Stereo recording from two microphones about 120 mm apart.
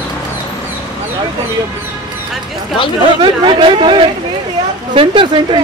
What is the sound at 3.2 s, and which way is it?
A woman's voice, 45° right (ahead or behind).